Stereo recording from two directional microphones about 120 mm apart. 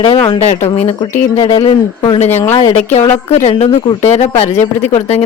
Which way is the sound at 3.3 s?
60° left (ahead or behind).